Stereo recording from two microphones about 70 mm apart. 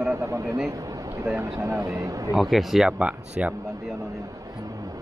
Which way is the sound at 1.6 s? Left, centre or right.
Right.